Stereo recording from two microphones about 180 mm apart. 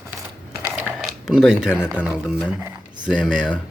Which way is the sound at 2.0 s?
5° right (ahead or behind).